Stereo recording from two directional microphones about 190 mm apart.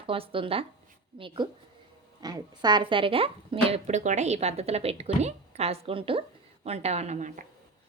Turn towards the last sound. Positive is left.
turn(degrees=-40)  # may be behind; listen again after turning